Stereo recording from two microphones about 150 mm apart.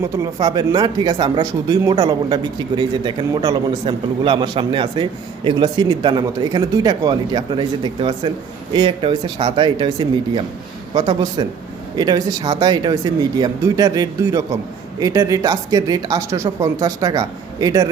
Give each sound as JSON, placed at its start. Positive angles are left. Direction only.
{"t": 0.0, "sound": "speech", "side_deg": -25}
{"t": 8.7, "sound": "speech", "side_deg": -35}